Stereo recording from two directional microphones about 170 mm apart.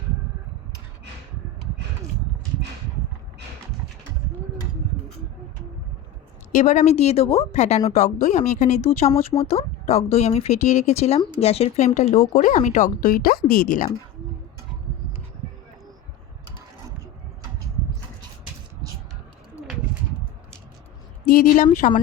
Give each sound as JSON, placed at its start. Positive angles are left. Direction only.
{"t": 6.5, "sound": "speech", "side_deg": 45}
{"t": 21.2, "sound": "speech", "side_deg": 50}